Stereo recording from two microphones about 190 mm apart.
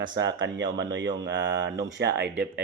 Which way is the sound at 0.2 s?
75° right (ahead or behind).